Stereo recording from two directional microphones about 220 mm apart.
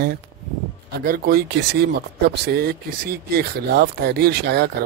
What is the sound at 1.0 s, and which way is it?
Speech, 45° right (ahead or behind).